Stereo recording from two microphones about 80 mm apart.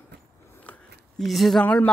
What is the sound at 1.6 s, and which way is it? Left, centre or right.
Speech, centre.